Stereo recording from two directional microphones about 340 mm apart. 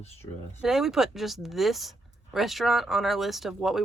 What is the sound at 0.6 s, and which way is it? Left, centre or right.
Speech, centre.